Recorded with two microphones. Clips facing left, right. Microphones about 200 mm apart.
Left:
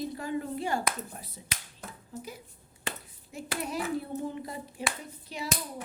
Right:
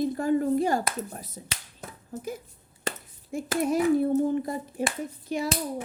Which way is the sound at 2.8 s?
45° right (ahead or behind).